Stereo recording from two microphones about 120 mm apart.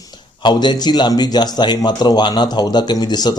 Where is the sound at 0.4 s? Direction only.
40° left (ahead or behind).